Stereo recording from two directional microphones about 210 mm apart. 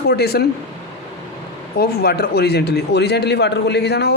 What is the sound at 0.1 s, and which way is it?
Speech, 50° left (ahead or behind).